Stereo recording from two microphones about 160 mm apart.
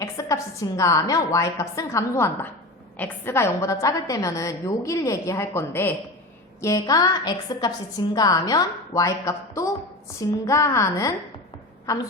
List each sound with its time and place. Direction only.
0.0 s a woman's voice: 20° left (ahead or behind)